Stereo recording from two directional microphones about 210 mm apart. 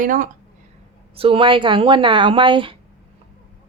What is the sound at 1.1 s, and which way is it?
Speech, 25° right (ahead or behind).